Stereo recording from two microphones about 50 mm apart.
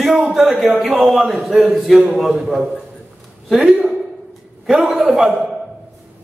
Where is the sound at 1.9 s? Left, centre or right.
Right.